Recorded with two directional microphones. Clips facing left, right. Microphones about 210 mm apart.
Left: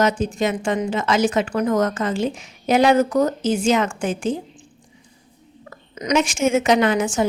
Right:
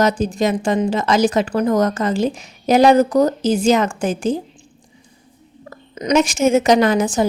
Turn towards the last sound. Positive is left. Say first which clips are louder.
# right 3 dB
turn(degrees=-35)  # may be behind; listen again after turning